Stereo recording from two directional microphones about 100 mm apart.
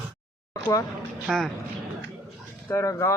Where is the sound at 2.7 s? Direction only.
30° left (ahead or behind).